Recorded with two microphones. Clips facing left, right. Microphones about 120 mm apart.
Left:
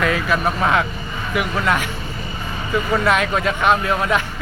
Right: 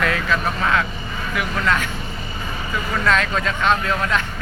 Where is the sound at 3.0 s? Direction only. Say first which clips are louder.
Left 2 dB; 15° left (ahead or behind).